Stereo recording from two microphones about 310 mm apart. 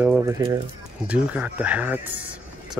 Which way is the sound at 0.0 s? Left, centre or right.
Centre.